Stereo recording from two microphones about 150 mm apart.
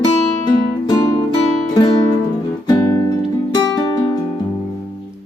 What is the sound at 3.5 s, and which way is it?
Music, 25° left (ahead or behind).